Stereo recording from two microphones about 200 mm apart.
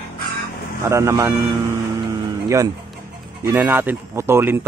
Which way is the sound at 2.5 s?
15° right (ahead or behind).